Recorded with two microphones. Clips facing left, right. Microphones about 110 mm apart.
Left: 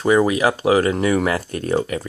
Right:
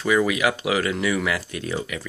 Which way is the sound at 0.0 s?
35° left (ahead or behind).